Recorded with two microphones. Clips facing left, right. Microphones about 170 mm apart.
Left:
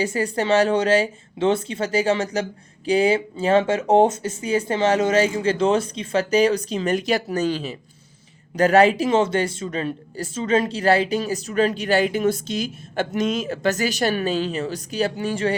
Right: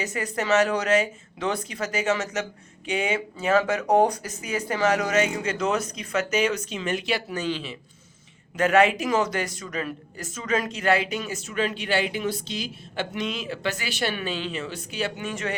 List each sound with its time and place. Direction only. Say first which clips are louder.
0.0 s speech: left 6 dB; 30° left (ahead or behind)